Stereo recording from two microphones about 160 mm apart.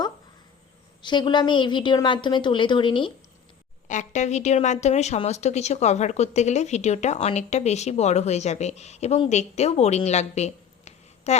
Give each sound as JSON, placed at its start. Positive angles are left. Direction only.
{"t": 1.0, "sound": "a woman's voice", "side_deg": 30}
{"t": 3.8, "sound": "speech", "side_deg": 50}